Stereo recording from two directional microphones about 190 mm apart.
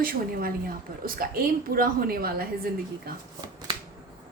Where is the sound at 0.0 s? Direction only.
50° right (ahead or behind).